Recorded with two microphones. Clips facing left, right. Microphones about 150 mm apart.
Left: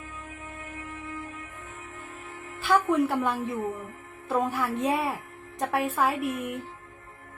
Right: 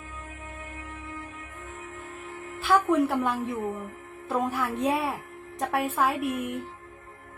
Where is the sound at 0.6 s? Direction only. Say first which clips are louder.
Left 1 dB; 45° right (ahead or behind).